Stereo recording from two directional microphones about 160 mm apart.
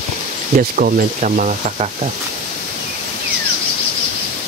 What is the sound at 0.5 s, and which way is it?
Sizzle, 60° right (ahead or behind).